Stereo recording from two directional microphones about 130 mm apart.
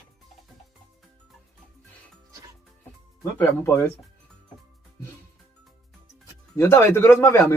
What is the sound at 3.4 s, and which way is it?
Speech, 20° left (ahead or behind).